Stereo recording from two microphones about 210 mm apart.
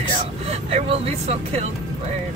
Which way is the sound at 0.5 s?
30° right (ahead or behind).